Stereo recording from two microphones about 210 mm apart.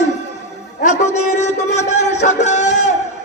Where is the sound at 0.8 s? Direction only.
35° left (ahead or behind).